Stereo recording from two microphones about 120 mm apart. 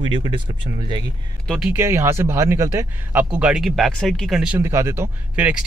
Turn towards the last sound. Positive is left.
turn(degrees=-15)  # may be behind; listen again after turning